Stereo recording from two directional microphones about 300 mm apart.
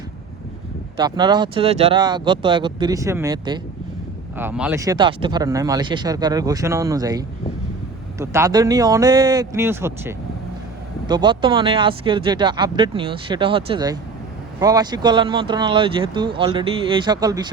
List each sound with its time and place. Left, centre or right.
0.9 s speech: centre